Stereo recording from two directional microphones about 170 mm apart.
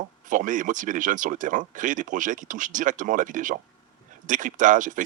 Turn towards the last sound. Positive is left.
turn(degrees=-50)  # may be behind; listen again after turning